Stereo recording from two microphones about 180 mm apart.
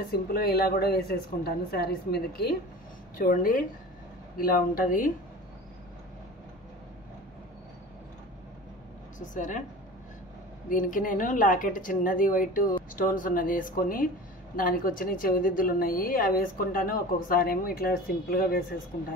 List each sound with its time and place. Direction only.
0.1 s a woman's voice: 55° left (ahead or behind)
3.2 s a woman's voice: 50° left (ahead or behind)
9.3 s a woman's voice: 45° left (ahead or behind)
10.7 s a woman's voice: 45° left (ahead or behind)